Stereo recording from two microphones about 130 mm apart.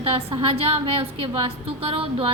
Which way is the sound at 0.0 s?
45° right (ahead or behind).